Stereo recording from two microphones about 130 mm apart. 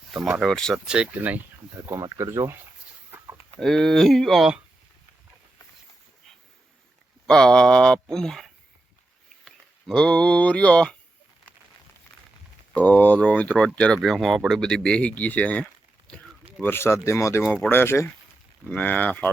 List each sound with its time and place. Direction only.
0.1 s speech: 5° right (ahead or behind)
0.9 s speech: 10° right (ahead or behind)
1.9 s speech: 25° right (ahead or behind)
3.6 s speech: centre (ahead or behind)
7.3 s speech: 5° left (ahead or behind)
12.7 s speech: 10° left (ahead or behind)
17.4 s speech: centre (ahead or behind)
17.7 s speech: 20° left (ahead or behind)